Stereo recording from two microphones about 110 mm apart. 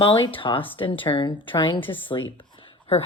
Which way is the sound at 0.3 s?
50° left (ahead or behind).